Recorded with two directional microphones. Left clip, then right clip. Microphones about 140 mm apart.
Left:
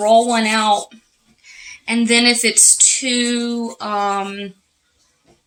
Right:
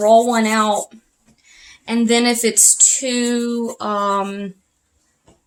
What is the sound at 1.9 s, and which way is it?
Speech, 70° right (ahead or behind).